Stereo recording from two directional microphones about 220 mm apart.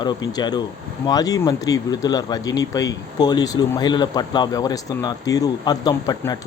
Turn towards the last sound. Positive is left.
turn(degrees=15)  # may be behind; listen again after turning